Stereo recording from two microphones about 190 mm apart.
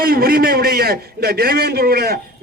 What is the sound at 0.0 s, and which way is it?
A man's voice, 50° right (ahead or behind).